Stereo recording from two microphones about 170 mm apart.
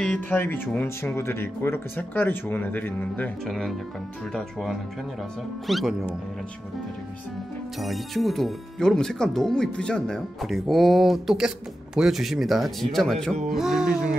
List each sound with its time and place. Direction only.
0.0 s speech: 10° left (ahead or behind)
7.8 s speech: centre (ahead or behind)